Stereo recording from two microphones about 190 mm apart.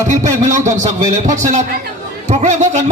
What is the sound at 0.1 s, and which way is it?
A man's voice, 40° right (ahead or behind).